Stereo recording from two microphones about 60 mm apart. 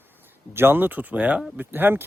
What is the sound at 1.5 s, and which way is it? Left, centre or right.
Speech, right.